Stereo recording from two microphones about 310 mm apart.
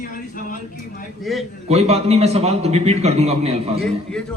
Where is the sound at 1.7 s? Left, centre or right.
Centre.